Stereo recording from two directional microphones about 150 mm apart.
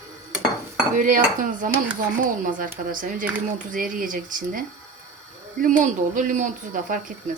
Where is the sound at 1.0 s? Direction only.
60° right (ahead or behind).